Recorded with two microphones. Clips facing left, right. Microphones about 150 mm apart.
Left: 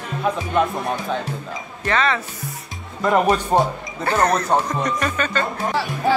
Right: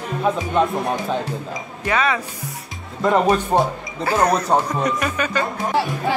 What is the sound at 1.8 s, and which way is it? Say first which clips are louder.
Speech: even; 10° right (ahead or behind).